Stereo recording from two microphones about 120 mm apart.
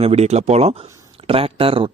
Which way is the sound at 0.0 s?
60° right (ahead or behind).